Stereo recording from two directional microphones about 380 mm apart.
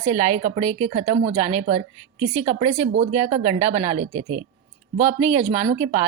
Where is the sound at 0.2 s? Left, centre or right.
Centre.